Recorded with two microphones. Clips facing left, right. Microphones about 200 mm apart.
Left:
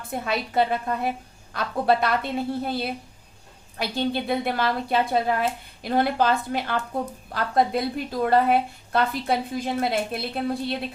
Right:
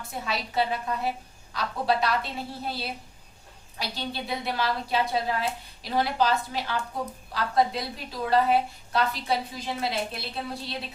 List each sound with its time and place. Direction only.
0.0 s a woman's voice: 55° left (ahead or behind)